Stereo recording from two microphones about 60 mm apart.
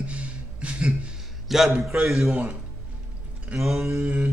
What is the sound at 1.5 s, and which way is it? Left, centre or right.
Speech, centre.